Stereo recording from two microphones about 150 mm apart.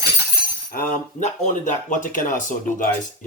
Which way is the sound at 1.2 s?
55° left (ahead or behind).